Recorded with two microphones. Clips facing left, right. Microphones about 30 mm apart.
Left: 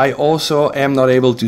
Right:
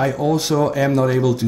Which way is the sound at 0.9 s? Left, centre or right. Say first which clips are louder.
Left 5 dB; left.